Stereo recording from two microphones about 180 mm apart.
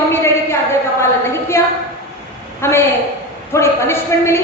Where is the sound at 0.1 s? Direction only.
15° left (ahead or behind).